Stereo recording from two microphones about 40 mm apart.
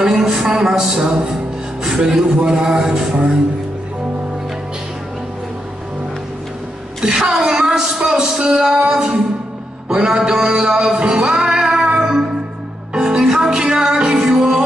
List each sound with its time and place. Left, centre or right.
0.0 s a sound: centre
0.5 s a man's voice: centre
7.0 s a man's voice: centre
10.9 s music: centre